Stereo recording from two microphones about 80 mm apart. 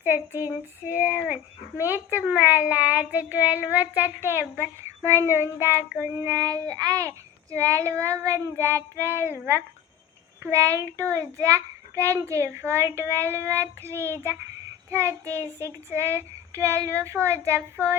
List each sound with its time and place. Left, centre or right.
0.0 s a child's voice: right
6.0 s child singing: right
7.5 s a child's voice: right
10.4 s a child's voice: right